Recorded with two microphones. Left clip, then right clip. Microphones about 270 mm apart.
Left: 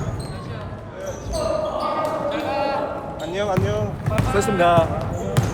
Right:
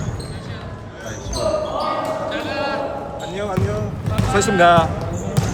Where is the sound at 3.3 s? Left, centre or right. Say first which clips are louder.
Left 3 dB; left.